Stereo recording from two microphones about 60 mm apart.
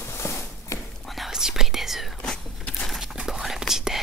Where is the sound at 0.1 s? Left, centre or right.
Left.